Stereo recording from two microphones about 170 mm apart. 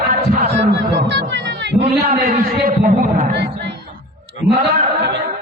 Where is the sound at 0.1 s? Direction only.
50° right (ahead or behind).